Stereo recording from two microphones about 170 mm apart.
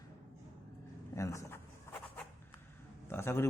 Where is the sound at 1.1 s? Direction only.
15° left (ahead or behind).